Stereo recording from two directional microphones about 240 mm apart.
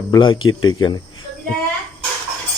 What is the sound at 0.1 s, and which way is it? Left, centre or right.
Speech, centre.